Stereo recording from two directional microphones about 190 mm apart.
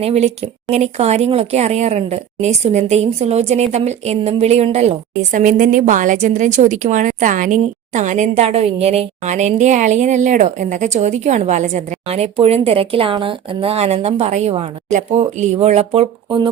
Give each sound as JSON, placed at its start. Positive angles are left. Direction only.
{"t": 0.0, "sound": "a woman's voice", "side_deg": -35}